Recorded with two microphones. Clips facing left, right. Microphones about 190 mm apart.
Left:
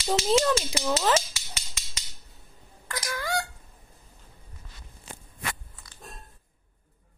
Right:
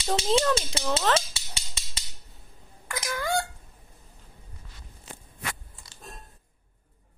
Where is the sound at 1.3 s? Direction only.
30° right (ahead or behind).